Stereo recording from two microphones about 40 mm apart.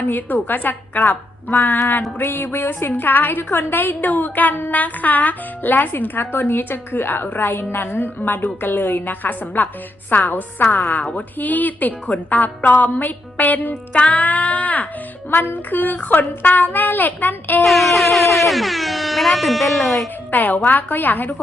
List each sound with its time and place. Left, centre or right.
0.1 s a child's voice: left
15.3 s a woman's voice: left
17.6 s speech: centre
20.3 s a child's voice: left